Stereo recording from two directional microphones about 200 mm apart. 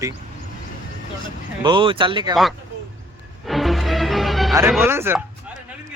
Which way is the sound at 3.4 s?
Centre (ahead or behind).